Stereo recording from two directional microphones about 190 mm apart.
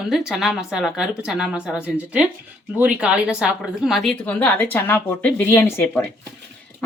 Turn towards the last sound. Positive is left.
turn(degrees=15)  # may be behind; listen again after turning